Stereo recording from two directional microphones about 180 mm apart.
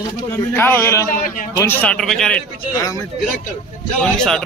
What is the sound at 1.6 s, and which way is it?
Speech, 10° left (ahead or behind).